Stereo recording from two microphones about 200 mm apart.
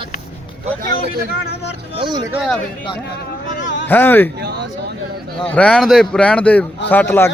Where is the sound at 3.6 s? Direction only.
65° left (ahead or behind).